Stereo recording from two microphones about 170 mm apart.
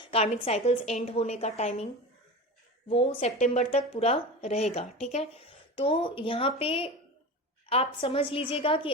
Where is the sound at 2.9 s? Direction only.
35° left (ahead or behind).